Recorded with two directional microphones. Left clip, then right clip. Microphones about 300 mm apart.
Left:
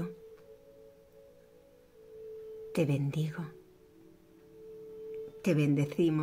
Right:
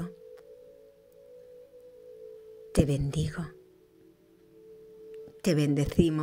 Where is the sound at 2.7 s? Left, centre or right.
Right.